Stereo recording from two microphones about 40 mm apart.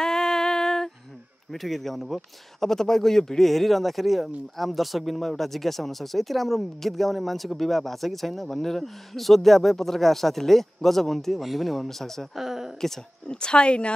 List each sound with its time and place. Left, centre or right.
0.0 s a sound: centre
1.5 s speech: centre
2.6 s speech: centre
12.4 s speech: centre
13.3 s a woman's voice: left